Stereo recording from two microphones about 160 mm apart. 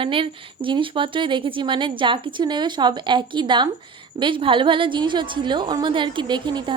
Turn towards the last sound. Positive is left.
turn(degrees=-30)  # may be behind; listen again after turning